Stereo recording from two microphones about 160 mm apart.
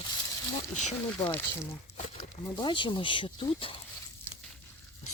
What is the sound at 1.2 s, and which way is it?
Speech, 15° left (ahead or behind).